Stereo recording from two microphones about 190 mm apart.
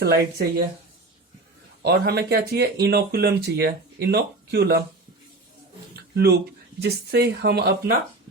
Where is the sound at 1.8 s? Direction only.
60° right (ahead or behind).